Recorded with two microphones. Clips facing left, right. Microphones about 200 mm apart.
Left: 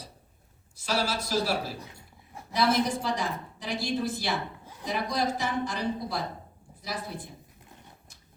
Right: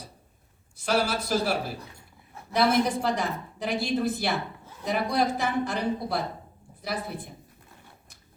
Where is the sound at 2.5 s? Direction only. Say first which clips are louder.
Right 3 dB; 60° right (ahead or behind).